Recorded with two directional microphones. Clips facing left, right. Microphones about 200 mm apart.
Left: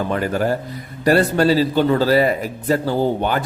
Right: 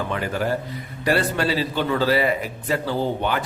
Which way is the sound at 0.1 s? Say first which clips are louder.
Left 4 dB; 45° left (ahead or behind).